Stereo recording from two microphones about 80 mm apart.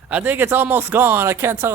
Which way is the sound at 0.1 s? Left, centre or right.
Centre.